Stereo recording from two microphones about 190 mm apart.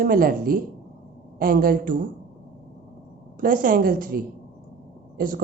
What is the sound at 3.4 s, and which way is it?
A woman's voice, 45° right (ahead or behind).